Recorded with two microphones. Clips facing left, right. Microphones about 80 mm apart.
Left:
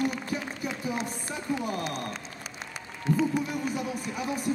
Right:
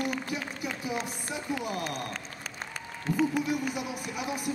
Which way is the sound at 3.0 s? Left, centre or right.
Right.